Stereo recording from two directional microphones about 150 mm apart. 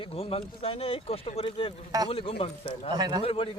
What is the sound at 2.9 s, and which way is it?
Speech, 25° right (ahead or behind).